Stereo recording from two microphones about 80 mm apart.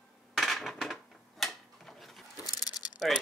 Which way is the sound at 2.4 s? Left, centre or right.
Left.